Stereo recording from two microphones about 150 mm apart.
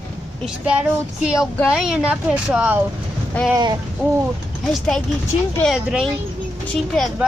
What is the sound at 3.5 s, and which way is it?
Speech, 25° right (ahead or behind).